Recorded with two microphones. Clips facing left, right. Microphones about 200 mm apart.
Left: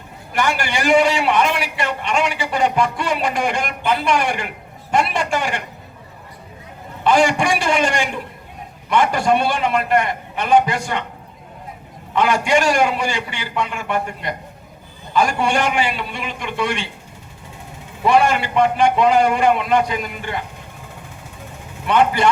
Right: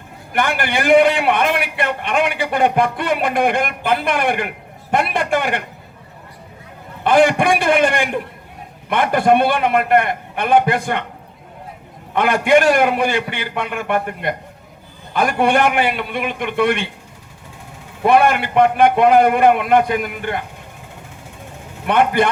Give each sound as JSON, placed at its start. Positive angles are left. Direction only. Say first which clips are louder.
{"t": 0.3, "sound": "a man's voice", "louder": "right 1 dB", "side_deg": -55}
{"t": 7.0, "sound": "a man's voice", "louder": "right 2 dB", "side_deg": -55}
{"t": 12.1, "sound": "a man's voice", "louder": "right 3 dB", "side_deg": -55}
{"t": 18.0, "sound": "a man's voice", "louder": "right 2 dB", "side_deg": -55}
{"t": 21.8, "sound": "a man's voice", "louder": "right 1 dB", "side_deg": -55}